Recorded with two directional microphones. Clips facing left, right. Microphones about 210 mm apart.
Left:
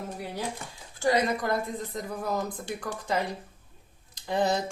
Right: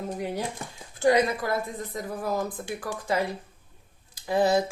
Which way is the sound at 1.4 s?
5° right (ahead or behind).